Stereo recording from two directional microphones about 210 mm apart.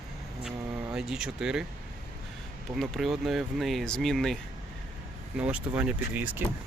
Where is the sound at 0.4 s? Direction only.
5° right (ahead or behind).